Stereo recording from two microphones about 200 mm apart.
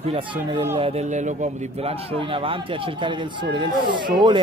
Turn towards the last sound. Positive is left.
turn(degrees=-25)  # may be behind; listen again after turning